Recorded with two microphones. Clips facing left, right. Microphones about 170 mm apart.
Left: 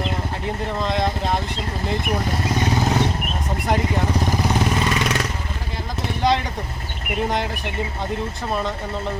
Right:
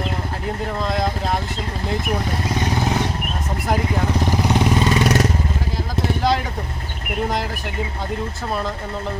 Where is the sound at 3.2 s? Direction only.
Centre (ahead or behind).